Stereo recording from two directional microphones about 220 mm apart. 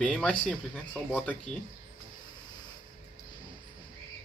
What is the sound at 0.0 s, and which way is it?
Speech, 5° left (ahead or behind).